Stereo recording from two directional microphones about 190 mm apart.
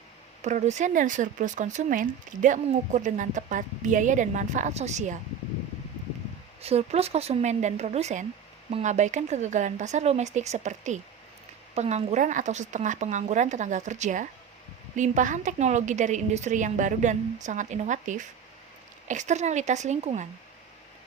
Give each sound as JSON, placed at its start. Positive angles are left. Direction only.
{"t": 0.4, "sound": "speech", "side_deg": -40}
{"t": 6.6, "sound": "speech", "side_deg": -30}